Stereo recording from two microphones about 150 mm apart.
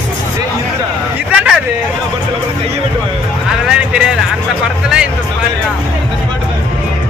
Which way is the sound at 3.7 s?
5° right (ahead or behind).